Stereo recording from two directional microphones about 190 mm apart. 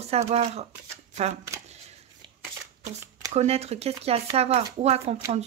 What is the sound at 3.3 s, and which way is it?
Speech, 35° right (ahead or behind).